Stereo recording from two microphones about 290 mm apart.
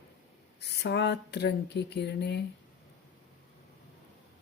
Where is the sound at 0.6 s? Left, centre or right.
Left.